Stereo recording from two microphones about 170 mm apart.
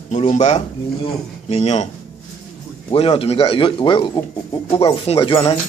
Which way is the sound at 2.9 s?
30° left (ahead or behind).